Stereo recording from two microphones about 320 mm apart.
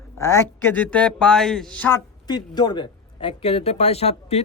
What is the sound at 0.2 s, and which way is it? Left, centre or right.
Speech, centre.